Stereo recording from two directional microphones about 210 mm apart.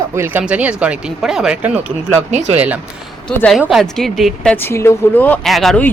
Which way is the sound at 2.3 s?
35° right (ahead or behind).